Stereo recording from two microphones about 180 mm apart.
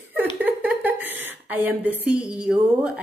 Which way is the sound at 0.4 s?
10° right (ahead or behind).